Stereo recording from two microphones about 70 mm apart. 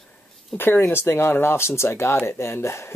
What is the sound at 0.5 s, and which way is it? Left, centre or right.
Speech, left.